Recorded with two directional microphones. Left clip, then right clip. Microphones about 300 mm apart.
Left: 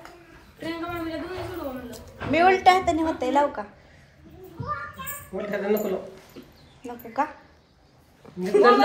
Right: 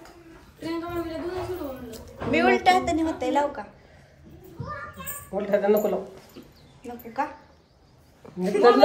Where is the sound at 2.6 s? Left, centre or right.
Centre.